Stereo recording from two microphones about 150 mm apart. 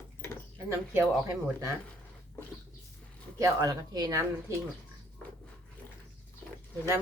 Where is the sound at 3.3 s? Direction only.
20° right (ahead or behind).